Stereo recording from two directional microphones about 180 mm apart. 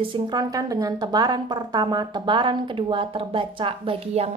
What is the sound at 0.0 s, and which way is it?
A woman's voice, 25° right (ahead or behind).